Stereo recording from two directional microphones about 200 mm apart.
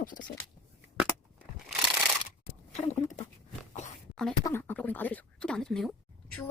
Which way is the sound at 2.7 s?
35° left (ahead or behind).